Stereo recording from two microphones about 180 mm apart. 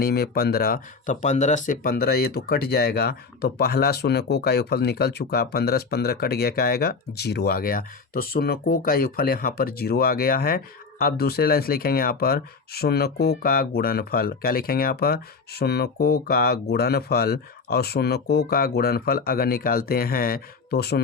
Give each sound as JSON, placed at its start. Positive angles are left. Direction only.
{"t": 0.0, "sound": "speech", "side_deg": 60}